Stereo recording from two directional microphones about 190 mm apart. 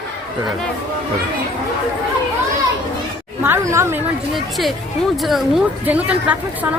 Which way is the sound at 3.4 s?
15° right (ahead or behind).